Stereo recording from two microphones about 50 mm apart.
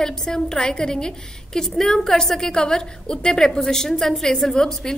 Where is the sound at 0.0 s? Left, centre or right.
Centre.